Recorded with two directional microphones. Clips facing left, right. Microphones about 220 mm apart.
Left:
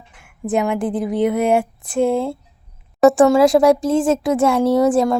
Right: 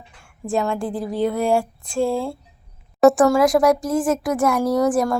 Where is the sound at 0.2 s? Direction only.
20° left (ahead or behind).